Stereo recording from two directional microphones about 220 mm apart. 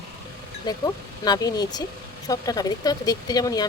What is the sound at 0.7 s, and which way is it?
Speech, 20° left (ahead or behind).